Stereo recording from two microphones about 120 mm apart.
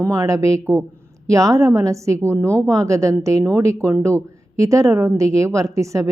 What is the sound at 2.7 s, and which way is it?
A woman's voice, 25° right (ahead or behind).